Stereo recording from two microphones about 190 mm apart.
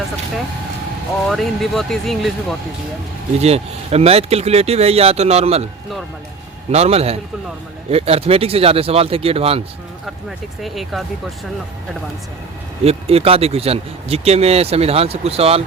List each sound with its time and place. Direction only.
1.3 s speech: centre (ahead or behind)
3.3 s speech: 35° right (ahead or behind)
6.7 s speech: 35° right (ahead or behind)
10.2 s speech: centre (ahead or behind)
12.8 s speech: 30° right (ahead or behind)